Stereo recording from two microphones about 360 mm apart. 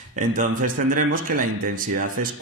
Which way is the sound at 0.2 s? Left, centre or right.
Right.